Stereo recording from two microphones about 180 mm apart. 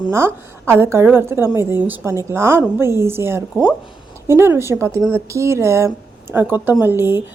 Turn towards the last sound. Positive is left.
turn(degrees=-10)  # may be behind; listen again after turning